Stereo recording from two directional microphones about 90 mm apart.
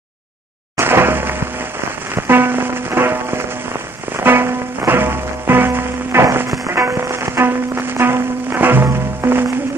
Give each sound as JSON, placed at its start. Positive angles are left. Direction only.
{"t": 0.7, "sound": "music", "side_deg": -25}